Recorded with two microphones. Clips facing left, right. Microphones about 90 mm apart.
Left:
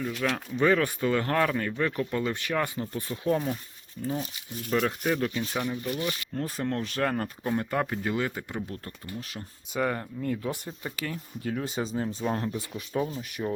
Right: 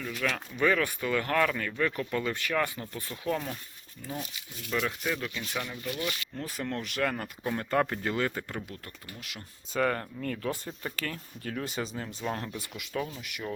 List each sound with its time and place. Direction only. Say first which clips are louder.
0.2 s speech: left 1 dB; 15° left (ahead or behind)
0.5 s speech: left 3 dB; 30° left (ahead or behind)
5.5 s speech: left 2 dB; 25° left (ahead or behind)
7.7 s speech: even; 10° left (ahead or behind)
9.7 s speech: even; 10° left (ahead or behind)
11.6 s speech: left 4 dB; 25° left (ahead or behind)